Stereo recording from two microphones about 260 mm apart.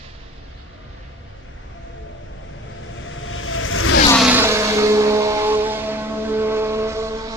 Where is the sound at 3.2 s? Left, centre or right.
Left.